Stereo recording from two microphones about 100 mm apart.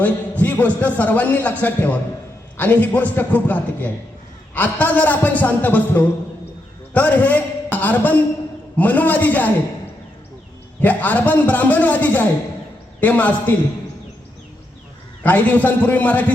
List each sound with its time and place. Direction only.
0.0 s a man's voice: 15° left (ahead or behind)
10.8 s a man's voice: 15° left (ahead or behind)
15.2 s a man's voice: 15° left (ahead or behind)